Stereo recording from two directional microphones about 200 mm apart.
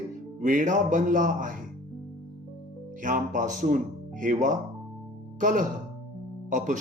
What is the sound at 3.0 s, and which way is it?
Speech, 40° right (ahead or behind).